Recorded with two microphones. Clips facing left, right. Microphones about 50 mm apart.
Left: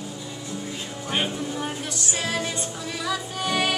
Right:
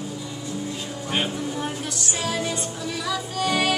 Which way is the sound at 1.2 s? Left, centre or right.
Centre.